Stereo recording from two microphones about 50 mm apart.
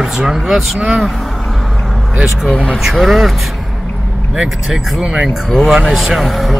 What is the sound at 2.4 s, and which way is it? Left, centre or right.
Speech, left.